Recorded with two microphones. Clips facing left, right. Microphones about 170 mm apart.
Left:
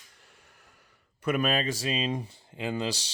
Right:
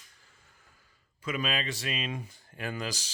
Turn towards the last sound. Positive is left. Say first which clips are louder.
# left 5 dB
turn(degrees=30)  # may be behind; listen again after turning